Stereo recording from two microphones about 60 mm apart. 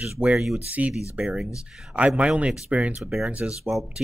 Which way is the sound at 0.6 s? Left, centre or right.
Right.